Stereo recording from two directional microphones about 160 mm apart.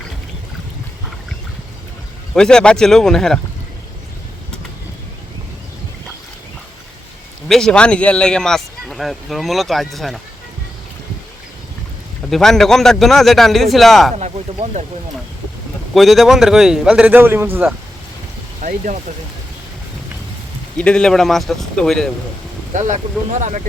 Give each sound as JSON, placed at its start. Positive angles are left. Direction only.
{"t": 2.3, "sound": "speech", "side_deg": 5}
{"t": 7.4, "sound": "speech", "side_deg": 5}
{"t": 12.3, "sound": "speech", "side_deg": 5}
{"t": 14.2, "sound": "speech", "side_deg": -45}
{"t": 16.0, "sound": "speech", "side_deg": 0}
{"t": 18.6, "sound": "speech", "side_deg": -55}
{"t": 20.7, "sound": "speech", "side_deg": 5}
{"t": 22.7, "sound": "speech", "side_deg": -50}